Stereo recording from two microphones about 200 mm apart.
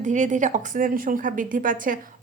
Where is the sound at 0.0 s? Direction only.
35° right (ahead or behind).